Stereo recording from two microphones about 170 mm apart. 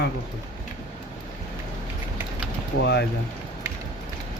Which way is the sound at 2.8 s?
75° left (ahead or behind).